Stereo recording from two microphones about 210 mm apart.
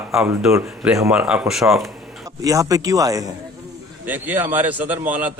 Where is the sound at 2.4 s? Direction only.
15° right (ahead or behind).